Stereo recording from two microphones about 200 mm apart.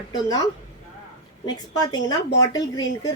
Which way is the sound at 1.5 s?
20° left (ahead or behind).